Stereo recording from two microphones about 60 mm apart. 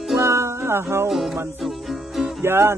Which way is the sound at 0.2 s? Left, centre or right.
Right.